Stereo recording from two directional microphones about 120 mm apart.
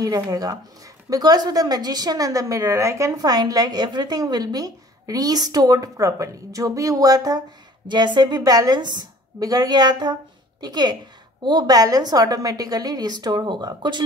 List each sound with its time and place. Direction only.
0.0 s a woman's voice: 30° right (ahead or behind)